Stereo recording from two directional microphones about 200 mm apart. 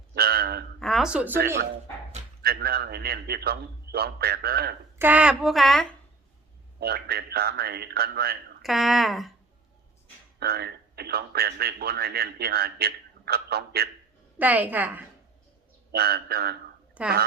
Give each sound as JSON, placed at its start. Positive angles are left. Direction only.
{"t": 0.1, "sound": "a sound", "side_deg": -50}
{"t": 0.8, "sound": "a sound", "side_deg": 0}
{"t": 2.4, "sound": "a man's voice", "side_deg": -50}
{"t": 4.9, "sound": "a woman's voice", "side_deg": -10}
{"t": 6.7, "sound": "a man's voice", "side_deg": -50}
{"t": 8.6, "sound": "a woman's voice", "side_deg": 0}
{"t": 10.4, "sound": "a man's voice", "side_deg": -50}
{"t": 14.3, "sound": "a woman's voice", "side_deg": -10}
{"t": 15.9, "sound": "a man's voice", "side_deg": -50}
{"t": 17.0, "sound": "a woman's voice", "side_deg": -10}